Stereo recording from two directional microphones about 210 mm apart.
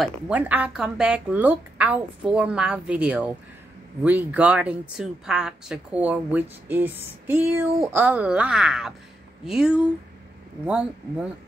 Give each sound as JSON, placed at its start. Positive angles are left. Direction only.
{"t": 0.0, "sound": "speech", "side_deg": -5}